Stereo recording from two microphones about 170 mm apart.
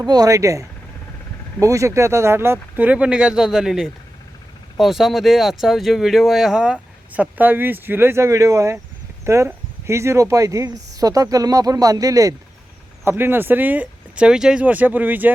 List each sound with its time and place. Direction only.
0.0 s speech: 25° right (ahead or behind)